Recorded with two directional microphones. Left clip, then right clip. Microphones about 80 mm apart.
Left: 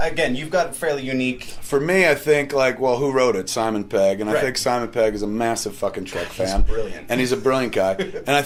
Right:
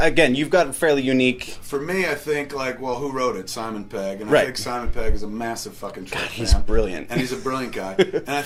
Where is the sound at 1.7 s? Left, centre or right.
Left.